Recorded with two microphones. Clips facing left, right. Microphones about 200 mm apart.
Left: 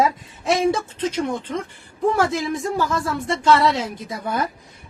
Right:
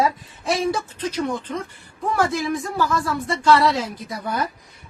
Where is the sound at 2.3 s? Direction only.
25° left (ahead or behind).